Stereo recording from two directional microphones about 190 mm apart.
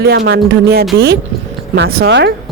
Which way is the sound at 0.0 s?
55° right (ahead or behind).